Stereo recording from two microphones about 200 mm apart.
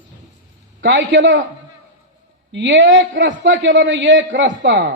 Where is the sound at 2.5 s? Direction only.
65° right (ahead or behind).